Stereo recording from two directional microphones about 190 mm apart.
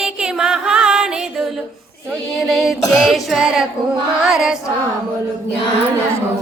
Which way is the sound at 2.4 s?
Centre (ahead or behind).